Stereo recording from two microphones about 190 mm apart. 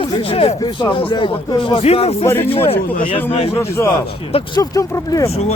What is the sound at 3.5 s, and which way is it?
Speech, 15° left (ahead or behind).